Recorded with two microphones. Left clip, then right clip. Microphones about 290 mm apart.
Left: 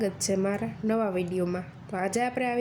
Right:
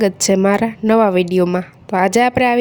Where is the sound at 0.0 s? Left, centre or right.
Right.